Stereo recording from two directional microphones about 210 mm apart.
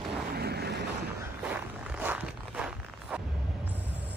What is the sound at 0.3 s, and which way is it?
Vehicle, 50° right (ahead or behind).